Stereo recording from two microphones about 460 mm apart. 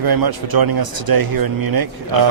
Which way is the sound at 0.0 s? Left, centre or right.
Right.